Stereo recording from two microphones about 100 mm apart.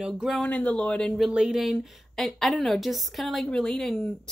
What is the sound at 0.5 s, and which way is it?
Speech, 15° left (ahead or behind).